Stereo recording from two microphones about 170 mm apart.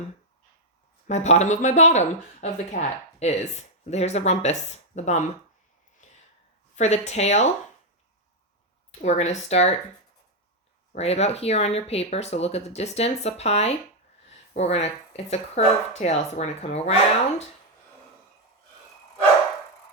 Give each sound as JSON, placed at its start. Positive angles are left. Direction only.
{"t": 1.0, "sound": "speech", "side_deg": 40}
{"t": 6.0, "sound": "a sound", "side_deg": 45}
{"t": 6.7, "sound": "speech", "side_deg": 40}
{"t": 8.9, "sound": "speech", "side_deg": 40}
{"t": 10.9, "sound": "speech", "side_deg": 40}